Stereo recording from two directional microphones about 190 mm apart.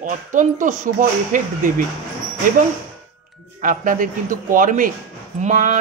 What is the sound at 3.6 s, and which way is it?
Speech, 45° right (ahead or behind).